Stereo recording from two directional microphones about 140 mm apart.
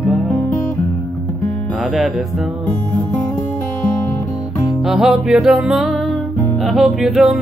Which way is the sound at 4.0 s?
20° left (ahead or behind).